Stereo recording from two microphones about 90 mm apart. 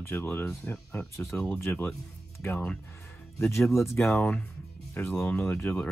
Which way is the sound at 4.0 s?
30° left (ahead or behind).